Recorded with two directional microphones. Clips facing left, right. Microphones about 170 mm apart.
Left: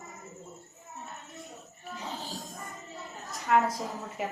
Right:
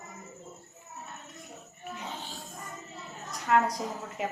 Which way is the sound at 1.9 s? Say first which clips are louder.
Left 2 dB; 40° left (ahead or behind).